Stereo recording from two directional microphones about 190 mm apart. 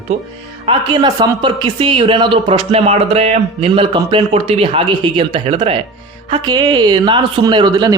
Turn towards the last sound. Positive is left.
turn(degrees=-20)  # may be behind; listen again after turning